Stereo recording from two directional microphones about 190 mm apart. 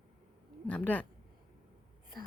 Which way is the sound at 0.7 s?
10° left (ahead or behind).